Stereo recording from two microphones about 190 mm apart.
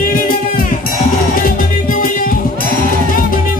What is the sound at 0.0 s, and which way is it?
Music, 50° left (ahead or behind).